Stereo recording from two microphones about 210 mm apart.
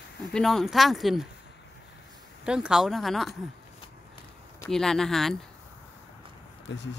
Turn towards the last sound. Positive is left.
turn(degrees=55)  # may be behind; listen again after turning